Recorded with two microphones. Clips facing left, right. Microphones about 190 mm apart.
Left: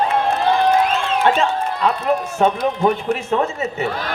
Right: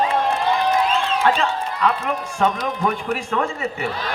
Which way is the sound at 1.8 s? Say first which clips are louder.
Left 3 dB; 25° left (ahead or behind).